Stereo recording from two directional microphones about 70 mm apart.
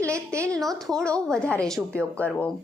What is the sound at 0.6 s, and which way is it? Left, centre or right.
Speech, centre.